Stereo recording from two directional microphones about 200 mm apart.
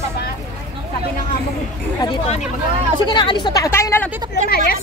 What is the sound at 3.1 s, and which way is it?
Speech, 25° left (ahead or behind).